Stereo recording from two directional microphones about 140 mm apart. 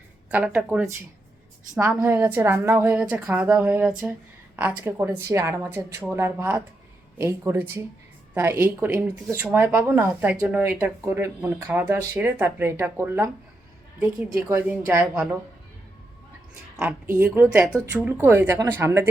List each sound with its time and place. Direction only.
0.3 s speech: 10° right (ahead or behind)
1.9 s a woman's voice: 15° right (ahead or behind)
14.4 s speech: 15° right (ahead or behind)
17.2 s speech: 10° right (ahead or behind)